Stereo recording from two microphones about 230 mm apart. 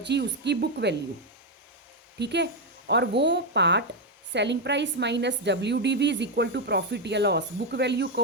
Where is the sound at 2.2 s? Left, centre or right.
Right.